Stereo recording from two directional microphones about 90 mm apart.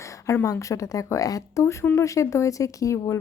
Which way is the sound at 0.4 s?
35° left (ahead or behind).